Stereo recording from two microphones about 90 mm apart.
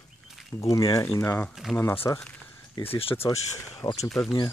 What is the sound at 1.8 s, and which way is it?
Speech, 25° left (ahead or behind).